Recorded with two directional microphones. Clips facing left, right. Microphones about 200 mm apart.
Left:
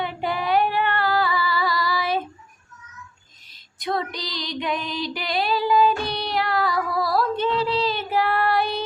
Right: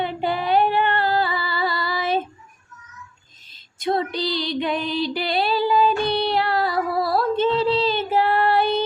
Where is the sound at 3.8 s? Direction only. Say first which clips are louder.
Right 4 dB; 25° right (ahead or behind).